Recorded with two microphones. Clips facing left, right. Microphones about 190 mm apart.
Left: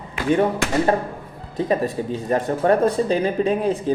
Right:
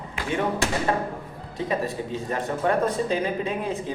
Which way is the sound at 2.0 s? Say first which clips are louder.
Left 6 dB; 35° left (ahead or behind).